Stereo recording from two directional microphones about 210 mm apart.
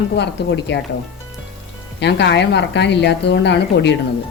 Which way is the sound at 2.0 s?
55° left (ahead or behind).